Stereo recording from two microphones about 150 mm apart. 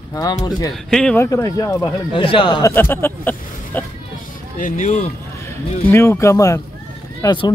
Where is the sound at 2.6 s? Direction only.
15° left (ahead or behind).